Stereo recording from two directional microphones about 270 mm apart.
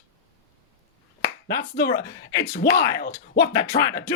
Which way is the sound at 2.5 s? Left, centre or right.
Left.